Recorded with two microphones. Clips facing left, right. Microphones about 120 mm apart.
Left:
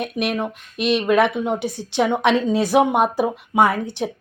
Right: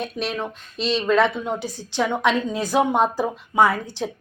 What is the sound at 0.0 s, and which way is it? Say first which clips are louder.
Speech: left 4 dB; 15° left (ahead or behind).